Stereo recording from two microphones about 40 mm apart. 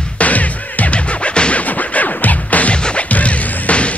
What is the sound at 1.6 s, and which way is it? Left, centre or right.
Music, left.